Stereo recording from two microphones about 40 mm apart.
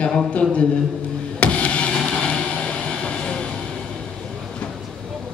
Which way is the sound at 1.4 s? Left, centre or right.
Left.